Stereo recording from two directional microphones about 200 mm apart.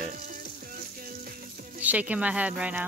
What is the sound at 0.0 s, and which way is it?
Sizzle, 45° right (ahead or behind).